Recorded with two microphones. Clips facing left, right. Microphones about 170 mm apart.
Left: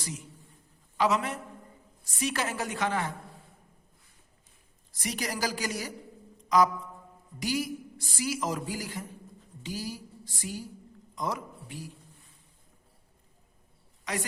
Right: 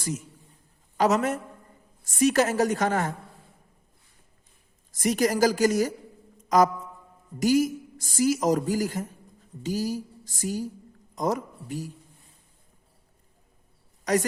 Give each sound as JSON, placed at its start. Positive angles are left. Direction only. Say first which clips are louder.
{"t": 0.9, "sound": "a woman's voice", "louder": "right 5 dB", "side_deg": -45}
{"t": 4.9, "sound": "a woman's voice", "louder": "right 11 dB", "side_deg": -45}
{"t": 14.0, "sound": "a woman's voice", "louder": "right 10 dB", "side_deg": -40}